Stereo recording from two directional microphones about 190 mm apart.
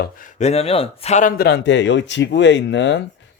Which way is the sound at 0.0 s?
45° left (ahead or behind).